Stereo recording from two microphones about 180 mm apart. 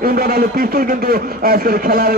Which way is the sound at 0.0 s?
55° right (ahead or behind).